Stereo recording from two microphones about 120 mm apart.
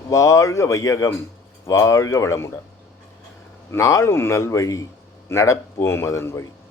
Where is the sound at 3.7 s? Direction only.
25° left (ahead or behind).